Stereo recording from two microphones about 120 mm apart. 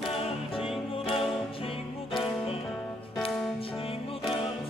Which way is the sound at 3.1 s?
Centre (ahead or behind).